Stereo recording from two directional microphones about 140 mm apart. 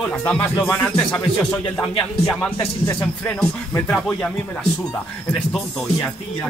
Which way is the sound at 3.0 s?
10° left (ahead or behind).